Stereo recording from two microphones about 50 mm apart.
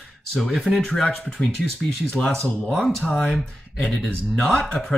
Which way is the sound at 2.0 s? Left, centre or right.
Centre.